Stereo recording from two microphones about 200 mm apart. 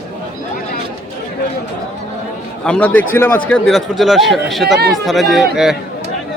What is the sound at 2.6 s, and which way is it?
A man's voice, 5° left (ahead or behind).